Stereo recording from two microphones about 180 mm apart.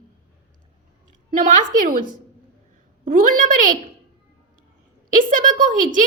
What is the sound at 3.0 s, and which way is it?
Speech, 50° right (ahead or behind).